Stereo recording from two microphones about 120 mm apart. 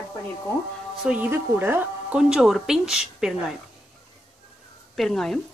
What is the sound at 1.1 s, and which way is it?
Speech, 15° right (ahead or behind).